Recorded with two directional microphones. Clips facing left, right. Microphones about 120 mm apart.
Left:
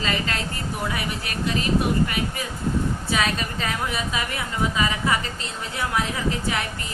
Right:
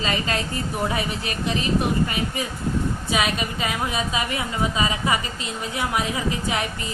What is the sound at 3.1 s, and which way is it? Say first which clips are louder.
A woman's voice: right 1 dB; 15° right (ahead or behind).